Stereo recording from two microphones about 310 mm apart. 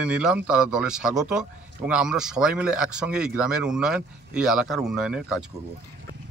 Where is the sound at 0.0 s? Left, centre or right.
Centre.